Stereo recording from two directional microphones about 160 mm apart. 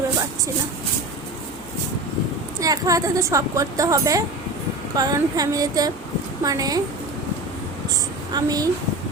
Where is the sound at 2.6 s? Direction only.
20° right (ahead or behind).